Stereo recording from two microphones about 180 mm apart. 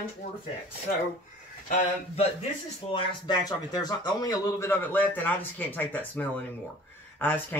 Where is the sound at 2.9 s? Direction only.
25° left (ahead or behind).